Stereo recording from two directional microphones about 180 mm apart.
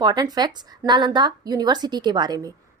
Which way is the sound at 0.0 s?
20° right (ahead or behind).